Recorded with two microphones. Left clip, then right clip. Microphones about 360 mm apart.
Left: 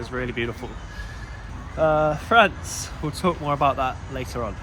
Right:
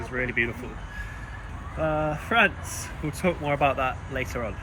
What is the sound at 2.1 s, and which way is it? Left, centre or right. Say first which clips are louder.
Speech: left 5 dB; centre.